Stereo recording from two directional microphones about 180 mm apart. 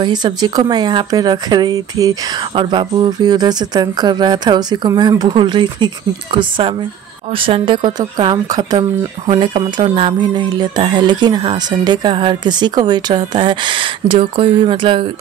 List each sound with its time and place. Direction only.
0.0 s speech: 25° right (ahead or behind)
7.3 s speech: 30° right (ahead or behind)